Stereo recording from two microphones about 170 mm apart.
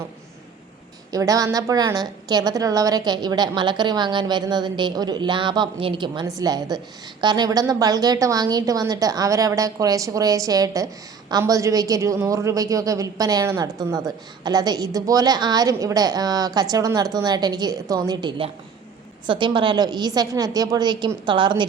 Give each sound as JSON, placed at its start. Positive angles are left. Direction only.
{"t": 1.1, "sound": "a woman's voice", "side_deg": -20}